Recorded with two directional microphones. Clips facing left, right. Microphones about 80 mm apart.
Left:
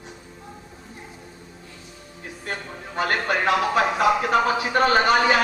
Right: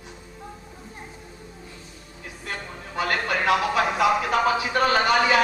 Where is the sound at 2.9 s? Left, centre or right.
Left.